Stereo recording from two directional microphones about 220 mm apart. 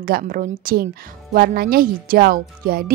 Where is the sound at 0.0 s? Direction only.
40° right (ahead or behind).